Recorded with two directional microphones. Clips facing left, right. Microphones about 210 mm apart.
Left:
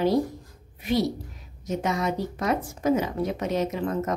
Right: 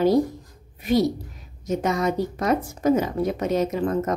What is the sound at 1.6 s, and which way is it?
Speech, 45° right (ahead or behind).